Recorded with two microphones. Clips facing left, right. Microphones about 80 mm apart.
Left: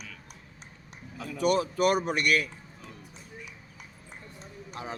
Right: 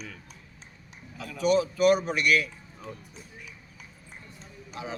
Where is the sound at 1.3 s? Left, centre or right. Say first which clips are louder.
Right 2 dB; left.